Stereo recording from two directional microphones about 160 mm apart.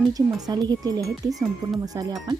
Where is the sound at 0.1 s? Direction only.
25° right (ahead or behind).